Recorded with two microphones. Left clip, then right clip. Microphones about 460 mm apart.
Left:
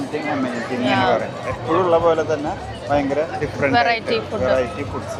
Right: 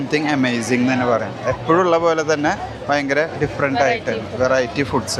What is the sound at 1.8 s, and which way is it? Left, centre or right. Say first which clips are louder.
Speech: left 3 dB; right.